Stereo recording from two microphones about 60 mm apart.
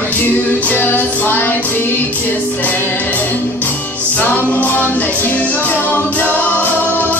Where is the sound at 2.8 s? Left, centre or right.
Left.